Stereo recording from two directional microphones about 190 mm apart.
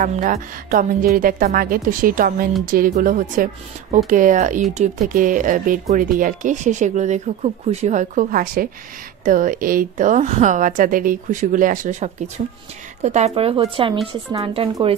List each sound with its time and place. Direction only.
0.0 s a woman's voice: 40° right (ahead or behind)